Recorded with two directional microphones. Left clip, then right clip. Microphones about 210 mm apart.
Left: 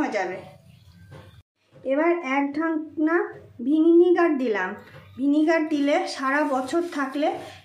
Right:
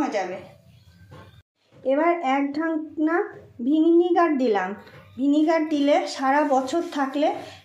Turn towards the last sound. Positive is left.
turn(degrees=-10)  # may be behind; listen again after turning